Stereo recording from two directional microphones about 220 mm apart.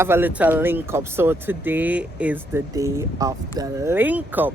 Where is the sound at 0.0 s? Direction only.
10° right (ahead or behind).